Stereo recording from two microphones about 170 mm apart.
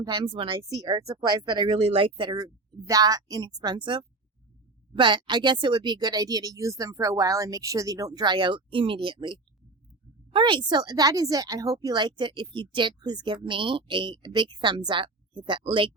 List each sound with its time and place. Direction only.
0.0 s a woman's voice: 25° right (ahead or behind)